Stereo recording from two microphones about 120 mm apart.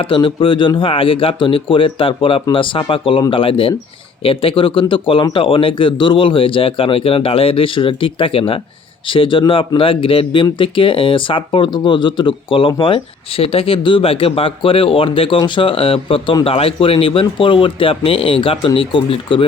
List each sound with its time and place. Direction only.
0.0 s speech: 45° left (ahead or behind)